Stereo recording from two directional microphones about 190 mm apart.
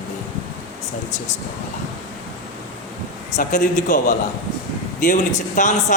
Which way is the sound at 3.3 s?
40° left (ahead or behind).